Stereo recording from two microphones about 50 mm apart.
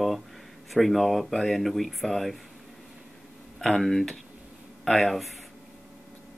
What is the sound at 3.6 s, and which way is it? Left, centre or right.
Speech, centre.